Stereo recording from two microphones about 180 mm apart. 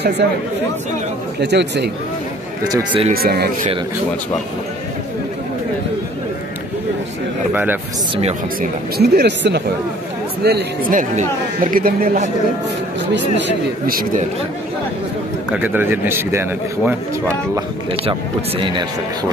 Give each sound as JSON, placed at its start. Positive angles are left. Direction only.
{"t": 1.4, "sound": "speech", "side_deg": -70}
{"t": 2.7, "sound": "speech", "side_deg": -30}
{"t": 3.2, "sound": "speech", "side_deg": -60}
{"t": 7.5, "sound": "speech", "side_deg": -10}
{"t": 8.5, "sound": "speech", "side_deg": -60}
{"t": 11.0, "sound": "speech", "side_deg": -45}
{"t": 13.1, "sound": "speech", "side_deg": -65}
{"t": 15.5, "sound": "speech", "side_deg": -10}
{"t": 18.6, "sound": "speech", "side_deg": -25}